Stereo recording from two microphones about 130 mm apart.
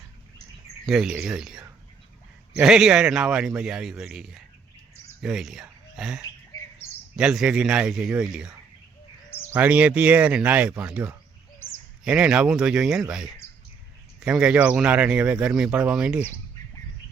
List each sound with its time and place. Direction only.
0.9 s speech: 5° right (ahead or behind)
5.6 s a sound: 5° right (ahead or behind)
6.2 s bird: 30° left (ahead or behind)
7.2 s speech: 5° right (ahead or behind)